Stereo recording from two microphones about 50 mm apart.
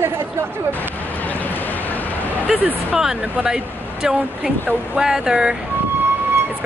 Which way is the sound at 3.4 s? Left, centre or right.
Centre.